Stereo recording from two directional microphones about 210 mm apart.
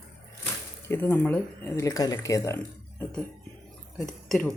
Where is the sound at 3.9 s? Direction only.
Centre (ahead or behind).